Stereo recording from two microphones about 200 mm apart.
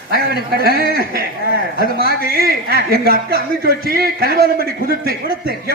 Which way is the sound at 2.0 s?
50° right (ahead or behind).